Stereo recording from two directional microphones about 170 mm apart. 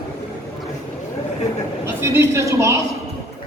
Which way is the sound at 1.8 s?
15° right (ahead or behind).